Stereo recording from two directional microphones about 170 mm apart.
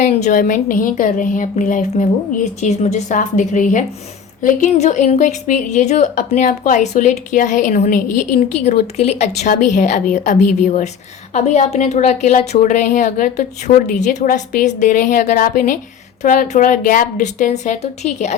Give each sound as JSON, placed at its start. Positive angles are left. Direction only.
{"t": 0.0, "sound": "a woman's voice", "side_deg": 45}